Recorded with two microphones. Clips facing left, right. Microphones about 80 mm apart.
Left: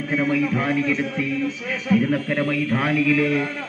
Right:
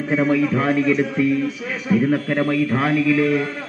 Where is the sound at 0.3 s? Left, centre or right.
Right.